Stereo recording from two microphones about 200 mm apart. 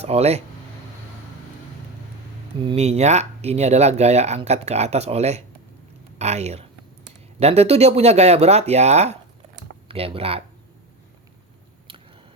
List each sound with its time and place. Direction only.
0.0 s speech: 30° right (ahead or behind)
2.6 s speech: 30° right (ahead or behind)